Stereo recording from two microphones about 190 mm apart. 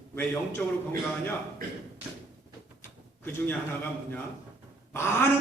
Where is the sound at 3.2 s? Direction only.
10° left (ahead or behind).